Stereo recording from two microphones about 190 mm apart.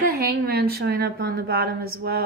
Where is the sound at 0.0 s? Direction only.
55° right (ahead or behind).